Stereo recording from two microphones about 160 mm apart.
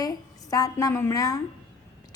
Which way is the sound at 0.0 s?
25° left (ahead or behind).